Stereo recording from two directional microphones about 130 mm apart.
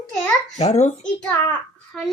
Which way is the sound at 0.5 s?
60° left (ahead or behind).